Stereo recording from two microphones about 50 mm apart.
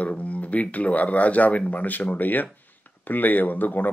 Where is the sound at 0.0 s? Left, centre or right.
Left.